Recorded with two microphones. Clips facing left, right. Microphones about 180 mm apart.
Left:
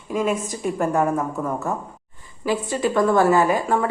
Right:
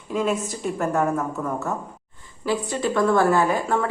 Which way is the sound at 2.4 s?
15° left (ahead or behind).